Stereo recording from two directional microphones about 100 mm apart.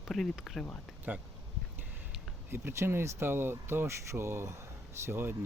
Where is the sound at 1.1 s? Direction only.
15° right (ahead or behind).